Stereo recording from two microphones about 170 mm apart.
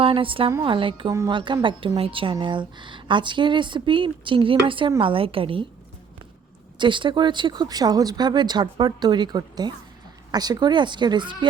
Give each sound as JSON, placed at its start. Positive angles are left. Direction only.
{"t": 0.0, "sound": "a woman's voice", "side_deg": -30}
{"t": 6.7, "sound": "a woman's voice", "side_deg": -30}